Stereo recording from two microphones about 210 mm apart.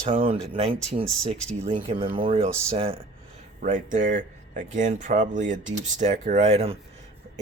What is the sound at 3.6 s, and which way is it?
Speech, 35° right (ahead or behind).